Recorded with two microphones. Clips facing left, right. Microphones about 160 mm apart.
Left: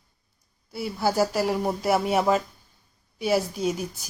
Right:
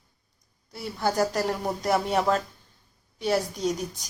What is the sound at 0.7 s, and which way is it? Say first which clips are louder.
A woman's voice: left 2 dB; 5° left (ahead or behind).